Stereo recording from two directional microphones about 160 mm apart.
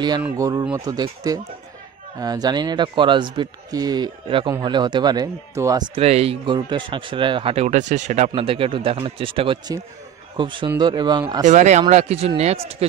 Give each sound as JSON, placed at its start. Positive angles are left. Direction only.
{"t": 0.4, "sound": "speech", "side_deg": -20}
{"t": 5.9, "sound": "speech", "side_deg": -40}
{"t": 8.3, "sound": "speech", "side_deg": -35}
{"t": 11.4, "sound": "speech", "side_deg": -50}